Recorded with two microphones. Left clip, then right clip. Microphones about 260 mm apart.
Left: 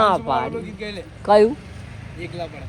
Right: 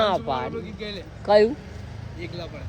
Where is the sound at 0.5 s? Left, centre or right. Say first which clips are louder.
Left 3 dB; centre.